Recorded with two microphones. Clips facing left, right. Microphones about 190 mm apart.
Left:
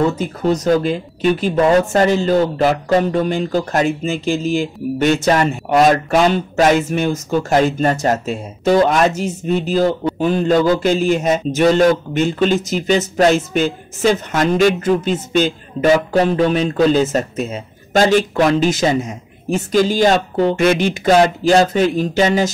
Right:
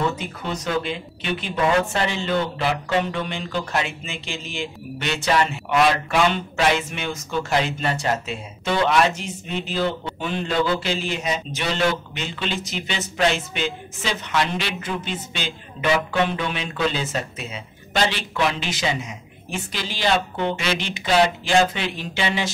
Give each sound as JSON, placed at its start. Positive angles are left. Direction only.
{"t": 0.2, "sound": "speech", "side_deg": 40}